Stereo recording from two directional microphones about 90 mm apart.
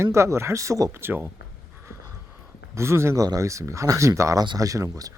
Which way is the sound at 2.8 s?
30° right (ahead or behind).